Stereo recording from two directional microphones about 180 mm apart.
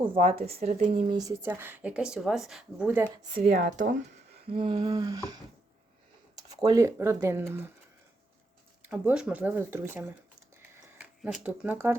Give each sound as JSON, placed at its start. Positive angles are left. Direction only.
{"t": 0.0, "sound": "speech", "side_deg": -30}
{"t": 1.2, "sound": "a woman's voice", "side_deg": -15}
{"t": 3.5, "sound": "speech", "side_deg": -50}
{"t": 4.4, "sound": "humming", "side_deg": -30}
{"t": 6.5, "sound": "a woman's voice", "side_deg": -20}
{"t": 8.8, "sound": "a woman's voice", "side_deg": -10}
{"t": 11.2, "sound": "a woman's voice", "side_deg": -5}